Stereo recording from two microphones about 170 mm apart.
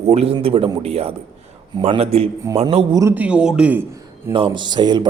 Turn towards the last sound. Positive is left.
turn(degrees=-25)  # may be behind; listen again after turning